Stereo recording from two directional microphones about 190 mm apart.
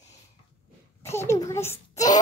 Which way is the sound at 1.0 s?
15° left (ahead or behind).